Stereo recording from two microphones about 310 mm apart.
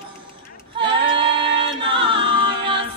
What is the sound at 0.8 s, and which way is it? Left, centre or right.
Female singing, centre.